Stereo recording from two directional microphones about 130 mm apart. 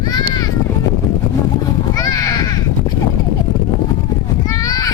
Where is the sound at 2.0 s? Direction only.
25° left (ahead or behind).